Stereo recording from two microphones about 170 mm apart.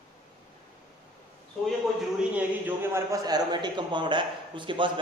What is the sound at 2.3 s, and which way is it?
A man's voice, 10° right (ahead or behind).